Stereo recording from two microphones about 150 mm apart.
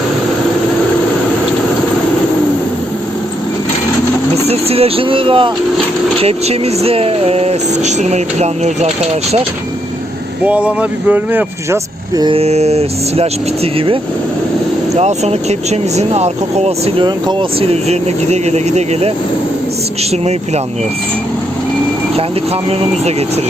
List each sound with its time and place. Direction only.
4.4 s speech: 40° right (ahead or behind)
10.4 s speech: 10° right (ahead or behind)
12.1 s a sound: 30° right (ahead or behind)
12.4 s speech: 45° right (ahead or behind)